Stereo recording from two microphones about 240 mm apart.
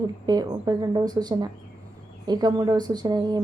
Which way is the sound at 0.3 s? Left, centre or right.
Centre.